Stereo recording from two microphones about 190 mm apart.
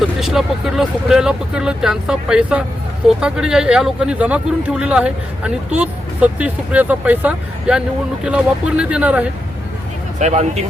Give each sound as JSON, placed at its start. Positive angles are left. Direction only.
{"t": 0.2, "sound": "speech", "side_deg": 0}
{"t": 10.2, "sound": "speech", "side_deg": -35}